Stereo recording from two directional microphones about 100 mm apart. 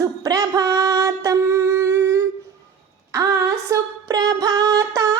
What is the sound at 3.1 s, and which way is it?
Female singing, 30° right (ahead or behind).